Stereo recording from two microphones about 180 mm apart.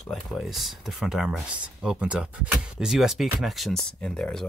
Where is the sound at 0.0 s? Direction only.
Centre (ahead or behind).